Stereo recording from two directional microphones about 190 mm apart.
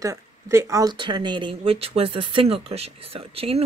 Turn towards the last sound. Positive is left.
turn(degrees=-30)  # may be behind; listen again after turning